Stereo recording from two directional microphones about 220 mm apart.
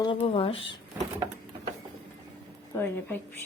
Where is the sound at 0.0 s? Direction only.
25° left (ahead or behind).